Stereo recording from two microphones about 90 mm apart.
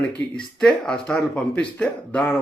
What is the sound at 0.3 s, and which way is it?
Speech, 5° left (ahead or behind).